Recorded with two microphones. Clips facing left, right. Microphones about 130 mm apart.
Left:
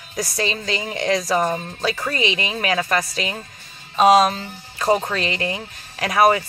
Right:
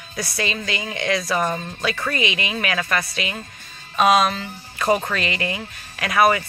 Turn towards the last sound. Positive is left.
turn(degrees=35)  # may be behind; listen again after turning